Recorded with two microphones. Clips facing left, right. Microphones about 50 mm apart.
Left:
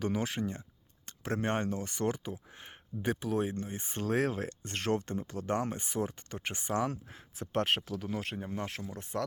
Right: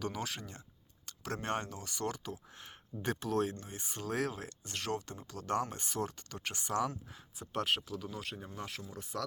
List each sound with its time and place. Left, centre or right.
0.0 s speech: left
3.1 s speech: centre
3.5 s speech: left
6.2 s speech: left
6.9 s speech: left